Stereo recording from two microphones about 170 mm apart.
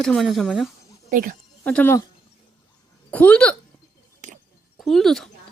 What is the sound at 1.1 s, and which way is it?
Speech, 55° right (ahead or behind).